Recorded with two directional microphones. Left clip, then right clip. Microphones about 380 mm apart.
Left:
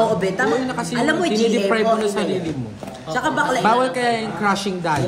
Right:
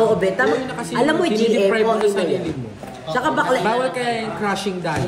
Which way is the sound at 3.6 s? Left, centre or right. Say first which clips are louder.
Left 3 dB; centre.